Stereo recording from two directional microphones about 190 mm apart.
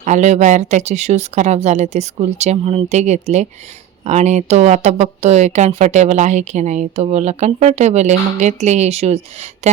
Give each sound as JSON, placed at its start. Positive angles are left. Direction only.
{"t": 0.0, "sound": "speech", "side_deg": -40}